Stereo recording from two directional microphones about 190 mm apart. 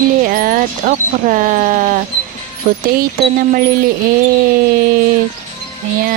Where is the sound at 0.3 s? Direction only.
45° right (ahead or behind).